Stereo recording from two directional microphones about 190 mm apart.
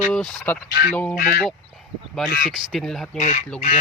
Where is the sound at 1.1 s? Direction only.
50° left (ahead or behind).